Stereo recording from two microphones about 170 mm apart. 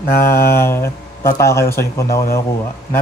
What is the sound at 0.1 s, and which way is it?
Speech, 15° left (ahead or behind).